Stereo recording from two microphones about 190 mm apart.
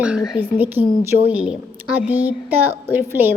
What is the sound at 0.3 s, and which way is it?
A woman's voice, 10° right (ahead or behind).